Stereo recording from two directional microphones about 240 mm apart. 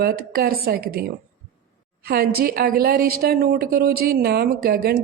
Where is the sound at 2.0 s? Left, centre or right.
Right.